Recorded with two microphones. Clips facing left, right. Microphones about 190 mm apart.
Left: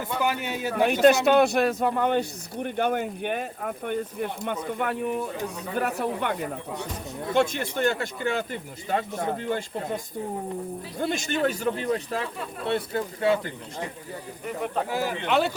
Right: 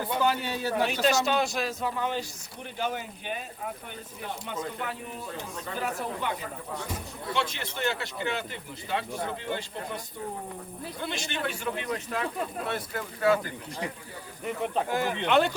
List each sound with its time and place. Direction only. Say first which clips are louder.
0.2 s a man's voice: left 1 dB; 15° left (ahead or behind)
1.0 s speech: left 10 dB; 60° left (ahead or behind)
7.3 s speech: left 9 dB; 50° left (ahead or behind)
11.0 s a man's voice: left 8 dB; 45° left (ahead or behind); by 13.5 s 25° left (ahead or behind)
14.8 s speech: left 1 dB; 5° left (ahead or behind)